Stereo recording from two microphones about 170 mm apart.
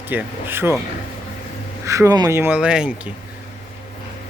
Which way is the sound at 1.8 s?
20° right (ahead or behind).